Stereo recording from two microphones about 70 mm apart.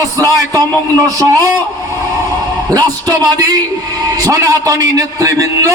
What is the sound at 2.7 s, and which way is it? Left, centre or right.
Speech, right.